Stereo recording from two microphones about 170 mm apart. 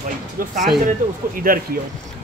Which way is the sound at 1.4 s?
55° right (ahead or behind).